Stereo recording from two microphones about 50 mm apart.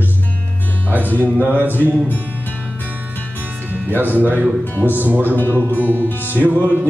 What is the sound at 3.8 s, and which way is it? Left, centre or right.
Speech, right.